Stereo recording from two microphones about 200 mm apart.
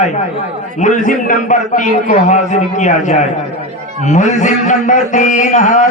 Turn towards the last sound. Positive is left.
turn(degrees=40)  # may be behind; listen again after turning